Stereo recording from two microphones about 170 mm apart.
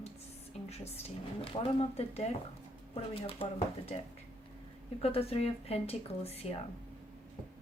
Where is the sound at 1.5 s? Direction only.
35° left (ahead or behind).